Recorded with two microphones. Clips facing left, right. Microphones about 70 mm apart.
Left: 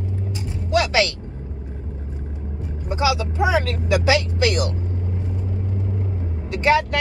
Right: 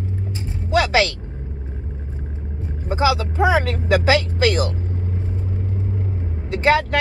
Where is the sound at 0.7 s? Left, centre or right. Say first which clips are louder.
Right 2 dB; right.